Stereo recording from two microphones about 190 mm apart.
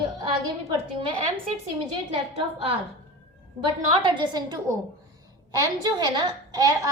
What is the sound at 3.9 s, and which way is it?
A child's voice, 25° right (ahead or behind).